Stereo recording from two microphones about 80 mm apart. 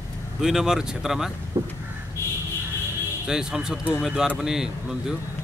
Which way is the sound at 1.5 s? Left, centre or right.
Right.